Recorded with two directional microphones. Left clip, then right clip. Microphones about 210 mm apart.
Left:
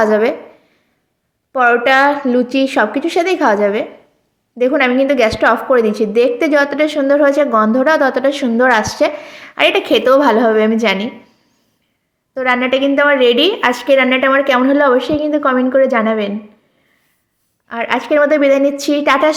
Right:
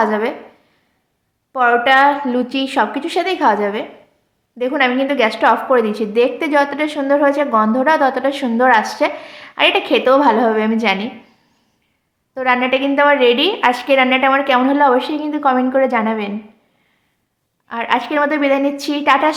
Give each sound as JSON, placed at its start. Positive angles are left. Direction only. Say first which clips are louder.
{"t": 0.0, "sound": "a woman's voice", "louder": "left 4 dB", "side_deg": 15}
{"t": 1.5, "sound": "a woman's voice", "louder": "left 1 dB", "side_deg": 15}
{"t": 12.3, "sound": "a woman's voice", "louder": "left 1 dB", "side_deg": 10}
{"t": 17.7, "sound": "a woman's voice", "louder": "left 2 dB", "side_deg": 10}